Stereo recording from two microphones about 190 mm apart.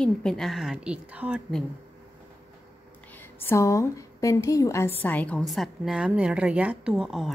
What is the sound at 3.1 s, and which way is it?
A woman's voice, 10° left (ahead or behind).